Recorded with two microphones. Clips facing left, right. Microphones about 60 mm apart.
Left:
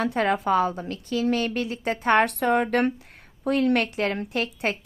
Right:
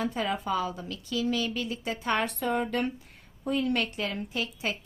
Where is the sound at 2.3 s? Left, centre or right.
Left.